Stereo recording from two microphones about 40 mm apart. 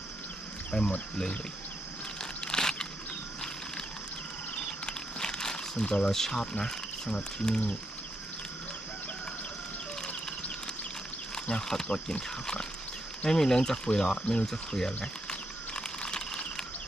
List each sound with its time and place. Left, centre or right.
0.7 s speech: left
2.4 s crunch: centre
4.9 s a sound: centre
6.1 s speech: centre
6.4 s speech: left
11.4 s speech: left
14.4 s speech: centre
15.0 s a sound: left